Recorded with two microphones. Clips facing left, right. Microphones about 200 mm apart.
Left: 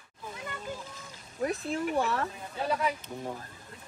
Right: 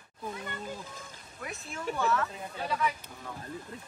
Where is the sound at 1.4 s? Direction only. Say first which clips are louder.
Left 7 dB; 35° left (ahead or behind).